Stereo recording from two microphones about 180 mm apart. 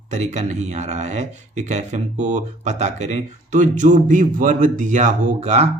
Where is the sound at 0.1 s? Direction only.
40° right (ahead or behind).